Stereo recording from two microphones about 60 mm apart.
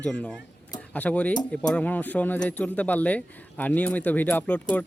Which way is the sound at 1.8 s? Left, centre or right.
Left.